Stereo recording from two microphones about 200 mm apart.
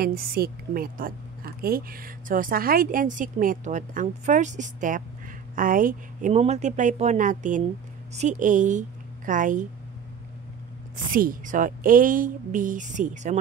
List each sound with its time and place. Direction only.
0.0 s a woman's voice: 50° right (ahead or behind)
11.1 s a woman's voice: 45° right (ahead or behind)